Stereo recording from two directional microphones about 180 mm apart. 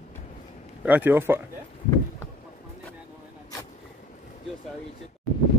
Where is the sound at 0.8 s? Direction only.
10° right (ahead or behind).